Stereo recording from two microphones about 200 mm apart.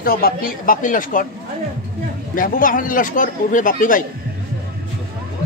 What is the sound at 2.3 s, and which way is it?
Speech, 45° left (ahead or behind).